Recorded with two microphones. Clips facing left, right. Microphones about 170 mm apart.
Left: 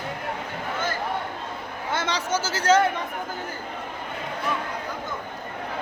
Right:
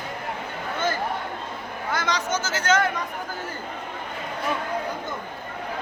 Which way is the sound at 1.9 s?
30° left (ahead or behind).